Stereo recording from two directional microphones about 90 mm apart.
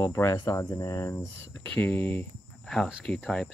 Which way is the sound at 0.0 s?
35° left (ahead or behind).